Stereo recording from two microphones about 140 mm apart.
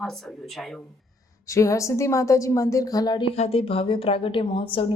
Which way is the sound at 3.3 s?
45° left (ahead or behind).